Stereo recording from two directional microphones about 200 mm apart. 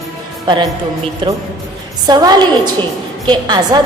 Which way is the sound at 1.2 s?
25° right (ahead or behind).